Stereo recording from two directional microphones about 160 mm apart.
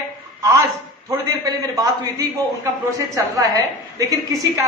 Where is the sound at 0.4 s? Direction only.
20° right (ahead or behind).